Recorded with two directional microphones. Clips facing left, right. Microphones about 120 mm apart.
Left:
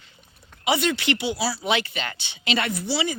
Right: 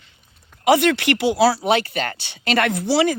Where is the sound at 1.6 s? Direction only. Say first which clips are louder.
Right 6 dB; 40° right (ahead or behind).